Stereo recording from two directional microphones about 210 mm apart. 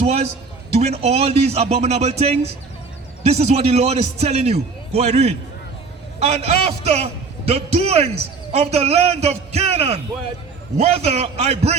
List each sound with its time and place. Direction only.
0.0 s a man's voice: 30° right (ahead or behind)